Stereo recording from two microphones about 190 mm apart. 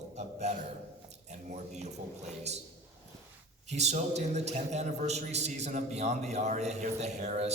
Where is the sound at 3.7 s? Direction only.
35° right (ahead or behind).